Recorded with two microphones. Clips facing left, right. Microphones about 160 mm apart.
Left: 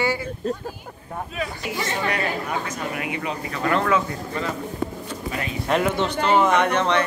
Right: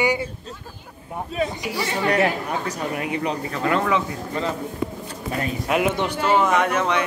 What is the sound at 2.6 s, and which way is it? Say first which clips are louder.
Speech: right 2 dB; 40° right (ahead or behind).